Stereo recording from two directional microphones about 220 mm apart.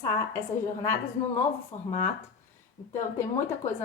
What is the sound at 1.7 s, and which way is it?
Speech, 30° left (ahead or behind).